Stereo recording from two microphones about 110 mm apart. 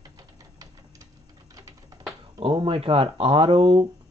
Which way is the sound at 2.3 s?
50° right (ahead or behind).